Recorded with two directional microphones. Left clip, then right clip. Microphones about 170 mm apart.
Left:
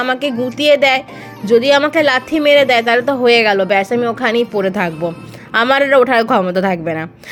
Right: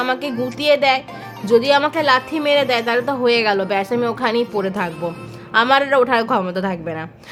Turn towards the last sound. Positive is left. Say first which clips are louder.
# left 7 dB
turn(degrees=25)  # may be behind; listen again after turning